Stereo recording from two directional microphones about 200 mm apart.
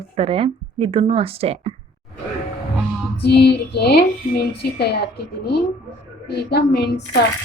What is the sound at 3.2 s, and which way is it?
A woman's voice, 55° left (ahead or behind).